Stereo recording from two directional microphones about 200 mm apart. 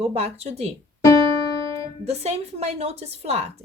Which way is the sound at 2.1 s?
30° right (ahead or behind).